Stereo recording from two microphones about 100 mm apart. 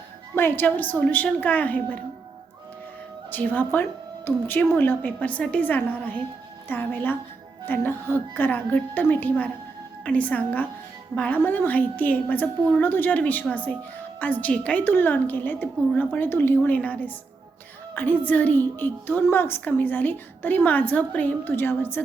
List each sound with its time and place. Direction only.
0.3 s a woman's voice: 20° left (ahead or behind)
3.3 s a woman's voice: 15° left (ahead or behind)